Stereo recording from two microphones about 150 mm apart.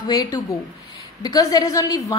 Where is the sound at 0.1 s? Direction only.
25° left (ahead or behind).